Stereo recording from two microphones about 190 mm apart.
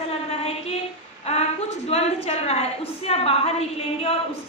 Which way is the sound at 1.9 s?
35° left (ahead or behind).